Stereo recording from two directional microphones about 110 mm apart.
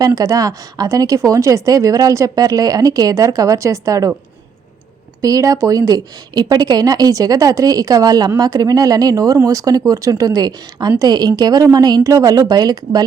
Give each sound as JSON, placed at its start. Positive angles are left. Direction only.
{"t": 0.0, "sound": "speech", "side_deg": -30}
{"t": 5.2, "sound": "speech", "side_deg": -30}